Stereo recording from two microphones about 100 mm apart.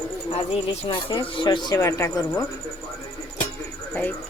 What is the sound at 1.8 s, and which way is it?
Speech, 30° left (ahead or behind).